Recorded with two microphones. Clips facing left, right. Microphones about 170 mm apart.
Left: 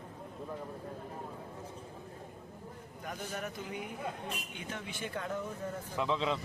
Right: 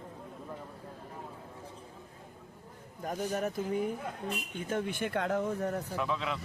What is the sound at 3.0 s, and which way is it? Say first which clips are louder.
Speech: right 7 dB; 40° right (ahead or behind).